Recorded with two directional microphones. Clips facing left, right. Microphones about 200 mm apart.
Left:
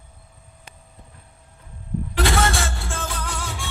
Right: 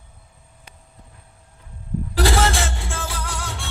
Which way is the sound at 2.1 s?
35° right (ahead or behind).